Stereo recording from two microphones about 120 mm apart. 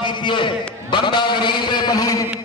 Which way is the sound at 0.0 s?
40° left (ahead or behind).